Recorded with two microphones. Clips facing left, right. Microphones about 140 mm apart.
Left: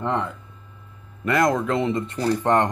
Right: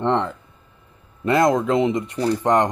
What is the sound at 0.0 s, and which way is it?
Speech, 30° right (ahead or behind).